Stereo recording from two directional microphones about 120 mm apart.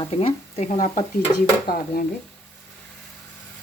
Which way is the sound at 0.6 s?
75° left (ahead or behind).